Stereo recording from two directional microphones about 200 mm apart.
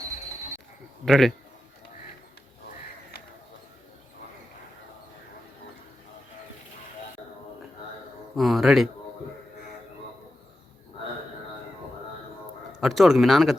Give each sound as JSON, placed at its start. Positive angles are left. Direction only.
{"t": 1.0, "sound": "speech", "side_deg": 0}
{"t": 8.4, "sound": "speech", "side_deg": 0}
{"t": 12.8, "sound": "speech", "side_deg": 0}